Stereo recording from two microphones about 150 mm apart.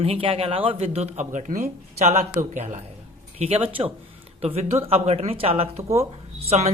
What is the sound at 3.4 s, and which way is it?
A man's voice, 40° right (ahead or behind).